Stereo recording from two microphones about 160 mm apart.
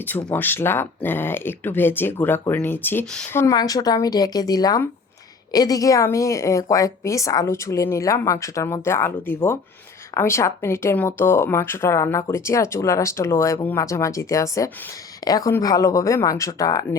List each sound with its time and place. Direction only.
0.0 s speech: 10° left (ahead or behind)
3.4 s a woman's voice: 25° left (ahead or behind)